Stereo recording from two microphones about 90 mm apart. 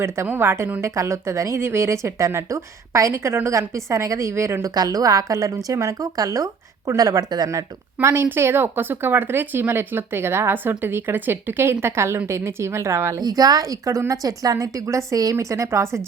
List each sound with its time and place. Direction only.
0.3 s a woman's voice: 25° right (ahead or behind)
4.7 s a woman's voice: 45° right (ahead or behind)
8.0 s speech: 25° right (ahead or behind)
13.1 s a woman's voice: 45° right (ahead or behind)